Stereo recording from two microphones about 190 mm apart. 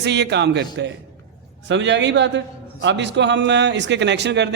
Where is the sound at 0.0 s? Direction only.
65° right (ahead or behind).